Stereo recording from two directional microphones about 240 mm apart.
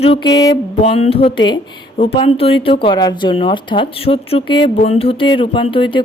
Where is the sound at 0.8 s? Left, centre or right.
Left.